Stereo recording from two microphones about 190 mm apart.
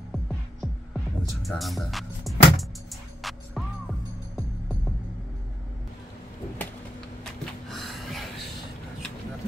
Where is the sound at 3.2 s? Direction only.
Centre (ahead or behind).